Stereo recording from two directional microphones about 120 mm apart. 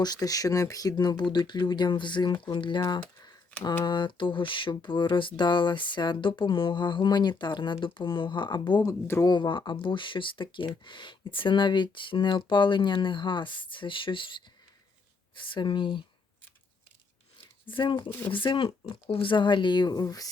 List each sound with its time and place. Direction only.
0.0 s speech: 35° left (ahead or behind)
3.8 s speech: 40° left (ahead or behind)
8.9 s speech: 20° left (ahead or behind)
9.2 s speech: 40° left (ahead or behind)
17.7 s speech: 40° left (ahead or behind)